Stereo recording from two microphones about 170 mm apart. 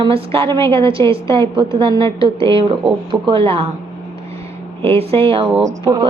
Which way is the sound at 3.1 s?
30° right (ahead or behind).